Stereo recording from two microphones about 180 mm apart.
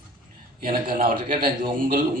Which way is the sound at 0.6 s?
50° right (ahead or behind).